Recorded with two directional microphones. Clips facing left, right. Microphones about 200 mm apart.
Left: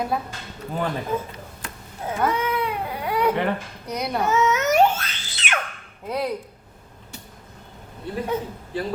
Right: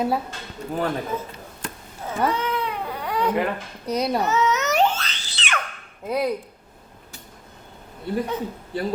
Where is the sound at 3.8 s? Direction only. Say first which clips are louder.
Right 5 dB; 25° right (ahead or behind).